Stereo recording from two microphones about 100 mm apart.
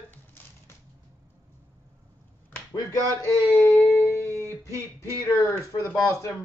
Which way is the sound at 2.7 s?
35° left (ahead or behind).